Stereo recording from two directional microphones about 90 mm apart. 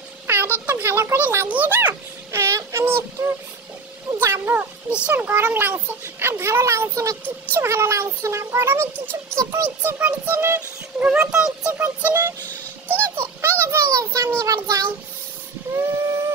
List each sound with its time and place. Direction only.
0.3 s a sound: 20° right (ahead or behind)
4.9 s speech: 15° right (ahead or behind); by 9.9 s 35° right (ahead or behind)
9.9 s speech: 20° right (ahead or behind)
11.3 s speech: 5° right (ahead or behind)
11.8 s speech: 25° right (ahead or behind)
12.8 s music: 25° right (ahead or behind)
14.4 s child singing: 40° right (ahead or behind)
15.7 s train: 30° right (ahead or behind)